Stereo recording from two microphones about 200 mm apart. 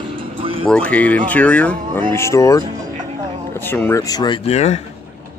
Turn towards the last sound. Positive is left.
turn(degrees=30)  # may be behind; listen again after turning